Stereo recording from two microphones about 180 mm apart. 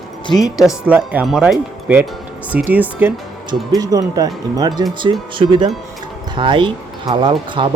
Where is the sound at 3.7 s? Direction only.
20° right (ahead or behind).